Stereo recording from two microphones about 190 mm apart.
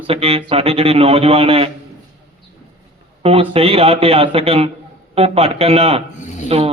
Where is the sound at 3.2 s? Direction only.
30° right (ahead or behind).